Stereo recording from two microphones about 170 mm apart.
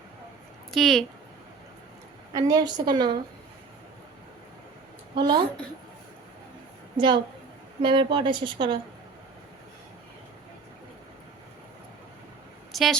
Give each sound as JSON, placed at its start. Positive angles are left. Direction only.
{"t": 0.7, "sound": "speech", "side_deg": 0}
{"t": 2.3, "sound": "a woman's voice", "side_deg": -25}
{"t": 5.1, "sound": "a woman's voice", "side_deg": -25}
{"t": 6.9, "sound": "a woman's voice", "side_deg": -30}
{"t": 12.7, "sound": "speech", "side_deg": 0}